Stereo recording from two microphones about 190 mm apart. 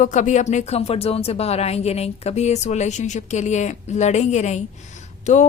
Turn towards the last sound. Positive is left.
turn(degrees=40)  # may be behind; listen again after turning